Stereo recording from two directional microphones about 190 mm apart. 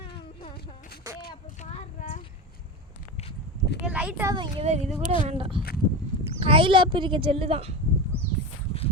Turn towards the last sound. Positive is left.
turn(degrees=-30)  # may be behind; listen again after turning